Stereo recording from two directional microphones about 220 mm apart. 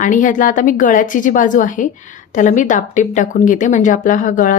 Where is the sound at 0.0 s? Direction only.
35° left (ahead or behind).